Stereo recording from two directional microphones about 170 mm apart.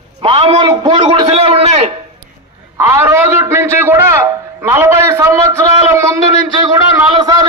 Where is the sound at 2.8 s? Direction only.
15° right (ahead or behind).